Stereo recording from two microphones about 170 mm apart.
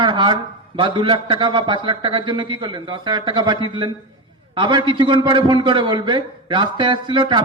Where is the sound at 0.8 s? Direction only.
30° right (ahead or behind).